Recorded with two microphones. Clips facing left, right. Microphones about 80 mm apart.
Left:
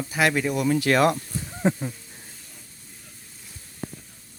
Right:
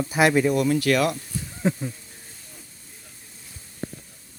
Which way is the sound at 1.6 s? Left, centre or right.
Centre.